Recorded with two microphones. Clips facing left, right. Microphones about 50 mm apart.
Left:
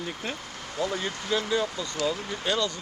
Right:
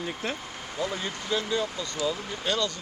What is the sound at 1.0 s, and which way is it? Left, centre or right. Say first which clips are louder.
Speech: left 1 dB; centre.